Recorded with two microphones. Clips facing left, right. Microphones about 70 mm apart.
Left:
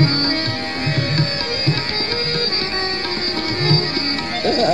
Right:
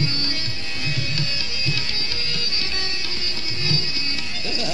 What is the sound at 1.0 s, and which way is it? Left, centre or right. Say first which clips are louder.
Sitar: left 8 dB; left.